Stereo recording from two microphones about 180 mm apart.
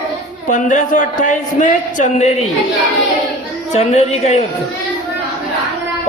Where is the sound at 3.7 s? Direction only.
40° left (ahead or behind).